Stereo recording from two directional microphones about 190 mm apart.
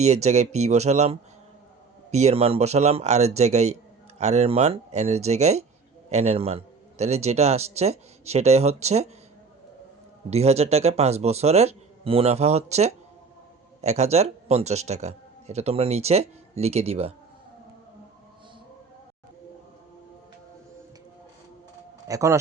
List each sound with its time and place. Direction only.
0.0 s speech: 35° right (ahead or behind)
10.2 s speech: 35° right (ahead or behind)
22.0 s speech: 15° right (ahead or behind)